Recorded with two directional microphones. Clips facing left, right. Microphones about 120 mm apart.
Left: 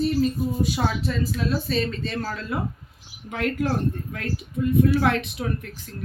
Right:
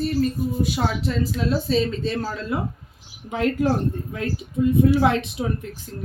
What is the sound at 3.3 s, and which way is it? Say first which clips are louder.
Speech: right 4 dB; 30° right (ahead or behind).